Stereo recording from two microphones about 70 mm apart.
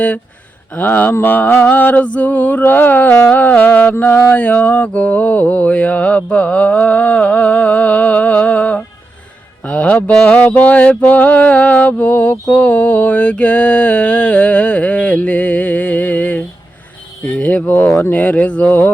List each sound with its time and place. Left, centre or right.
0.7 s mantra: left